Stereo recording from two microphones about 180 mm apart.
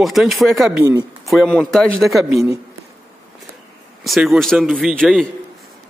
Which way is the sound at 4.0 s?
Centre (ahead or behind).